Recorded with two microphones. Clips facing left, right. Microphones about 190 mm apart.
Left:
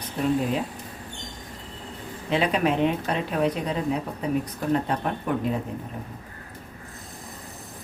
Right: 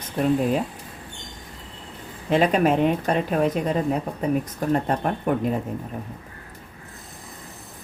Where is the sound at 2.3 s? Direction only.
45° right (ahead or behind).